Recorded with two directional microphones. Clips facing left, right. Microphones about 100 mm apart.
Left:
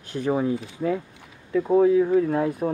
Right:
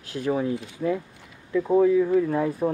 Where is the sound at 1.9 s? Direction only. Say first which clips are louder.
Left 1 dB; 20° left (ahead or behind).